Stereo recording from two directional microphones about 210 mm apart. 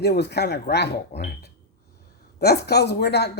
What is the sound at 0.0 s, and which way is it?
Speech, 50° left (ahead or behind).